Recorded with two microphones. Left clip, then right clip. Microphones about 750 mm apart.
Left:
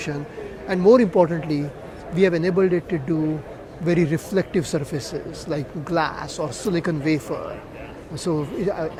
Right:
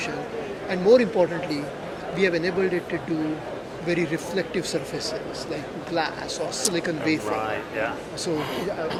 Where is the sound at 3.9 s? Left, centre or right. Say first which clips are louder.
Left 4 dB; left.